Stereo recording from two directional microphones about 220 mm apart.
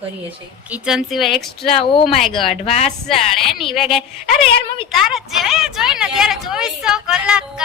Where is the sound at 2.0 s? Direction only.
Centre (ahead or behind).